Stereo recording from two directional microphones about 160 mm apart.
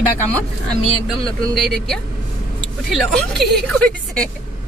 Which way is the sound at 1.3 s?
Centre (ahead or behind).